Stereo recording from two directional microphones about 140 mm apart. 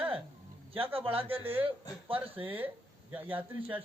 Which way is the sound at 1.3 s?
15° right (ahead or behind).